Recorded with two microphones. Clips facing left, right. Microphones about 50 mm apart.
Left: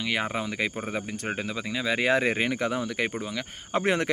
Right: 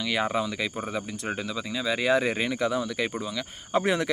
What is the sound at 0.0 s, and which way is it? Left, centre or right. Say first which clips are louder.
Speech: right 2 dB; left.